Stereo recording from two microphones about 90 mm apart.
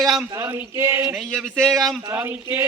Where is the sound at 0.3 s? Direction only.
35° right (ahead or behind).